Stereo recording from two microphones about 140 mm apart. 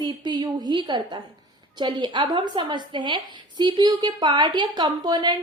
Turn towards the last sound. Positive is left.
turn(degrees=-30)  # may be behind; listen again after turning